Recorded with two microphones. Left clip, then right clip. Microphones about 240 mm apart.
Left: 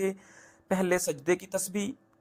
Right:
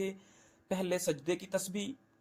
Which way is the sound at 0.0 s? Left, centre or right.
Left.